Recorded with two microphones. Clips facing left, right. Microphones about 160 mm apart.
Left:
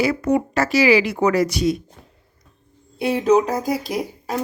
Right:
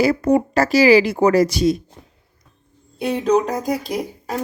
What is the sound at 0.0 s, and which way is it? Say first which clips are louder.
Speech: right 3 dB; 35° right (ahead or behind).